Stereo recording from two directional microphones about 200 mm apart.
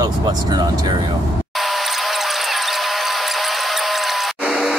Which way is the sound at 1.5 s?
Centre (ahead or behind).